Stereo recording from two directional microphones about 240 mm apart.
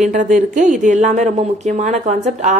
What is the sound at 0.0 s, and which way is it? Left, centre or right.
Speech, right.